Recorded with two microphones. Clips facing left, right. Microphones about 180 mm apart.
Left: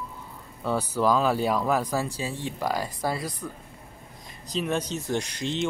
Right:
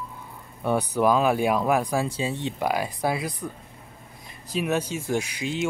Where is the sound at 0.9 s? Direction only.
15° right (ahead or behind).